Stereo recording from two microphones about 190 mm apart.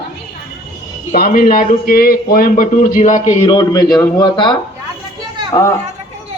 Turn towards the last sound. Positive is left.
turn(degrees=15)  # may be behind; listen again after turning